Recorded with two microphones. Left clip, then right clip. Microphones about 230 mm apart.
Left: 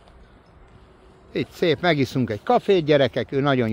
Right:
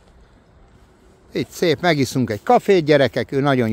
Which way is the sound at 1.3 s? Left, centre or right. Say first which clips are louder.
Right 2 dB; centre.